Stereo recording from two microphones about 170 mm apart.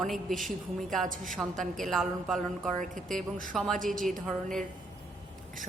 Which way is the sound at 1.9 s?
Centre (ahead or behind).